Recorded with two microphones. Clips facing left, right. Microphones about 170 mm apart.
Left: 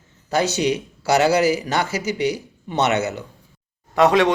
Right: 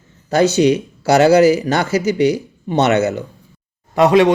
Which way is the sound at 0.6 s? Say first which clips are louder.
Right 8 dB; 55° right (ahead or behind).